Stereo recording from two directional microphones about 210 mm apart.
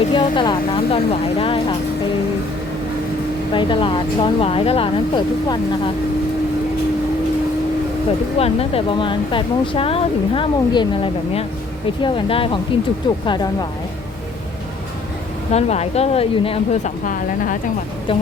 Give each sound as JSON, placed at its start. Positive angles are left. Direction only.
{"t": 0.1, "sound": "speech", "side_deg": 25}
{"t": 3.5, "sound": "speech", "side_deg": 25}
{"t": 8.4, "sound": "speech", "side_deg": 30}
{"t": 15.5, "sound": "speech", "side_deg": 30}